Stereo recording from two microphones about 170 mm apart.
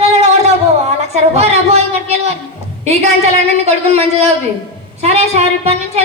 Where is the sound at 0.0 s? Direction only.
40° right (ahead or behind).